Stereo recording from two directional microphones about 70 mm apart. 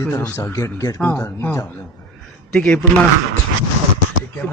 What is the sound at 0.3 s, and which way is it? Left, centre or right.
Speech, left.